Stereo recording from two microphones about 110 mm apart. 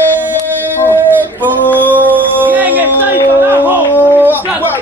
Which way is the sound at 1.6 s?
15° left (ahead or behind).